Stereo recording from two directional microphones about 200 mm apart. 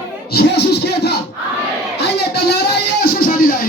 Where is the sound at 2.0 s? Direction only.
55° left (ahead or behind).